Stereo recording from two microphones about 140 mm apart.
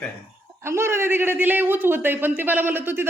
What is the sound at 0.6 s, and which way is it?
A man's voice, 20° right (ahead or behind).